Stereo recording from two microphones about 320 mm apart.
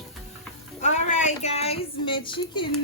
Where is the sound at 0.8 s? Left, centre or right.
Left.